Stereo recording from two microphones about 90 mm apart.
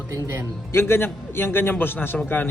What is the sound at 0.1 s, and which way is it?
Speech, 35° right (ahead or behind).